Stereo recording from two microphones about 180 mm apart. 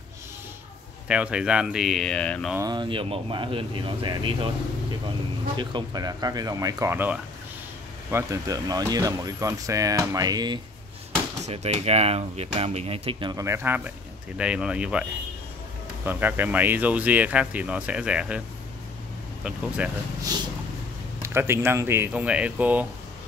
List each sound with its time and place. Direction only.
1.0 s speech: 5° right (ahead or behind)
2.6 s speech: 25° right (ahead or behind)
5.6 s speech: 25° right (ahead or behind)
11.4 s speech: 35° right (ahead or behind); by 15.0 s 5° right (ahead or behind)
16.1 s speech: 10° right (ahead or behind)
19.8 s speech: 5° right (ahead or behind)
21.2 s speech: 15° right (ahead or behind)